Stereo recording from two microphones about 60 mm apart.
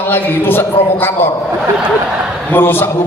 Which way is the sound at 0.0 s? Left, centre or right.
Left.